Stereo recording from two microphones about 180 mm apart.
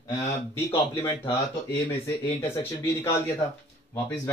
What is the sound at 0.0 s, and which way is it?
Speech, 15° left (ahead or behind).